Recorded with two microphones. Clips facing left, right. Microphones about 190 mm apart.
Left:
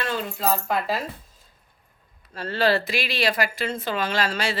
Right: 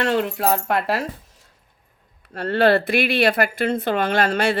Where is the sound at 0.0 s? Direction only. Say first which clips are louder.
Right 6 dB; 65° right (ahead or behind).